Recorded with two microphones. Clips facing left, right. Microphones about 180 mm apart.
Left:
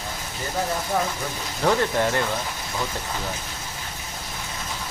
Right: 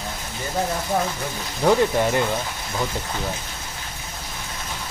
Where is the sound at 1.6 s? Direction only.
10° right (ahead or behind).